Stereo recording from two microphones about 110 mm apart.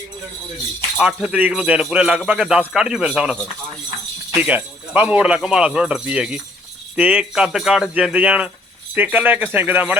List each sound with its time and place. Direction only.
0.9 s speech: 10° right (ahead or behind)
4.4 s speech: 15° right (ahead or behind)